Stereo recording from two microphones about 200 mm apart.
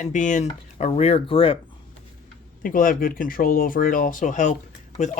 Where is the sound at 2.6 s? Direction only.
45° left (ahead or behind).